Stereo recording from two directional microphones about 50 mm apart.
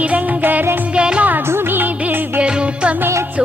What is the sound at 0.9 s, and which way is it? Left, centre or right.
Music, right.